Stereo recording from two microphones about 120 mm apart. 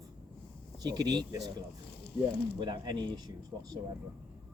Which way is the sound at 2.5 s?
40° right (ahead or behind).